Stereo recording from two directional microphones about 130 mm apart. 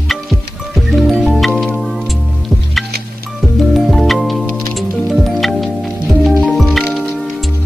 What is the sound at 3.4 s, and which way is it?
Music, centre (ahead or behind).